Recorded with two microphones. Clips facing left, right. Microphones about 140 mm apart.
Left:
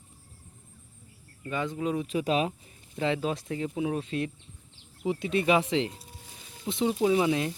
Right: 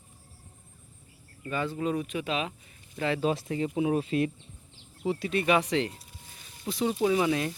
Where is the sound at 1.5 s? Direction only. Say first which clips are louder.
Even; 15° left (ahead or behind).